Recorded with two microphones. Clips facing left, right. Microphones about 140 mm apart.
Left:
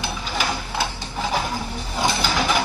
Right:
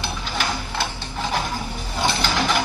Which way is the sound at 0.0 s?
5° left (ahead or behind).